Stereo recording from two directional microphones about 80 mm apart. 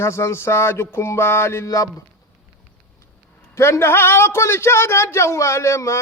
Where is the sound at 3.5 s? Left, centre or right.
Left.